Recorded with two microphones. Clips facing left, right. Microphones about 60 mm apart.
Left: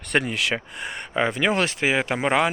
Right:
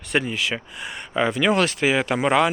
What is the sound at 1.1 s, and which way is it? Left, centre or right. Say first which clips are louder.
Speech: right 2 dB; left.